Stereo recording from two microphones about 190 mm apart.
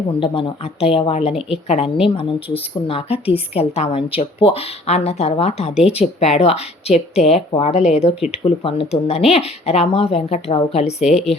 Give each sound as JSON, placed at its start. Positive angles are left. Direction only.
{"t": 0.1, "sound": "speech", "side_deg": 25}
{"t": 1.3, "sound": "a woman's voice", "side_deg": 0}
{"t": 1.6, "sound": "speech", "side_deg": 35}
{"t": 5.7, "sound": "a woman's voice", "side_deg": -5}
{"t": 6.0, "sound": "speech", "side_deg": 35}